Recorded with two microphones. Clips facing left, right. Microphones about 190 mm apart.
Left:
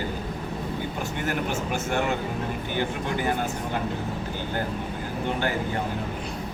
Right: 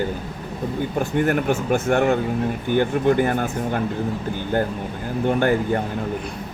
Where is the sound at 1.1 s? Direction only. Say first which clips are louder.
Right 9 dB; 55° right (ahead or behind).